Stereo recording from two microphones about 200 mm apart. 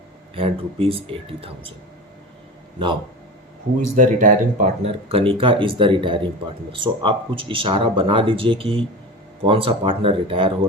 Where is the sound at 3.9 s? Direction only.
40° right (ahead or behind).